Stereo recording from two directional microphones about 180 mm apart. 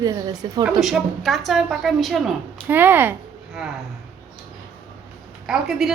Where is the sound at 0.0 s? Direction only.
20° right (ahead or behind).